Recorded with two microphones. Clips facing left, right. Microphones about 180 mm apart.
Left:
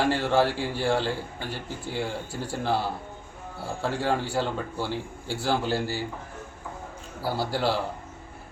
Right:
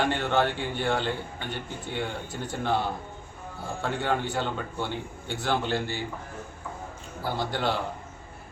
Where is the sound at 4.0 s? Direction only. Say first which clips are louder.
Left 1 dB; 30° left (ahead or behind).